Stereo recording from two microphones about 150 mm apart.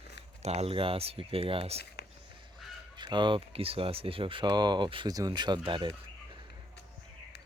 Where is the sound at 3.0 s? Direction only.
30° right (ahead or behind).